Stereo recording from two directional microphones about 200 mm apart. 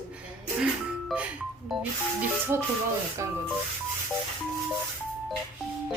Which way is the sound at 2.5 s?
15° right (ahead or behind).